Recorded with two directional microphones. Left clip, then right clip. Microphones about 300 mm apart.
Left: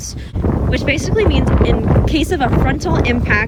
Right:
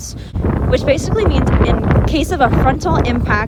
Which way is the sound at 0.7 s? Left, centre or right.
Centre.